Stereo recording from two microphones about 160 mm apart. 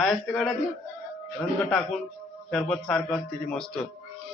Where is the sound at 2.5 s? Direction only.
Centre (ahead or behind).